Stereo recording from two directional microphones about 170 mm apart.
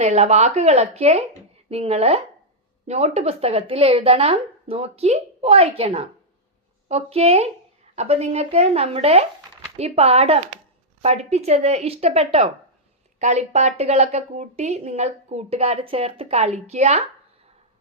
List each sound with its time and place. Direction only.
0.0 s speech: 40° right (ahead or behind)